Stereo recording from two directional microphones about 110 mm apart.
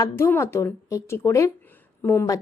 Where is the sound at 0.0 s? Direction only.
25° left (ahead or behind).